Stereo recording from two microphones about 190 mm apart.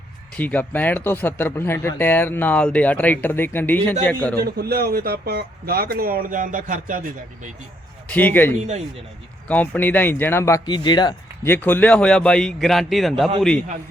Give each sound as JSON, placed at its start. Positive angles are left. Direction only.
{"t": 0.3, "sound": "speech", "side_deg": 10}
{"t": 4.4, "sound": "speech", "side_deg": -55}
{"t": 8.0, "sound": "speech", "side_deg": 10}
{"t": 8.5, "sound": "speech", "side_deg": -35}
{"t": 9.5, "sound": "speech", "side_deg": 10}
{"t": 11.4, "sound": "a man's voice", "side_deg": 10}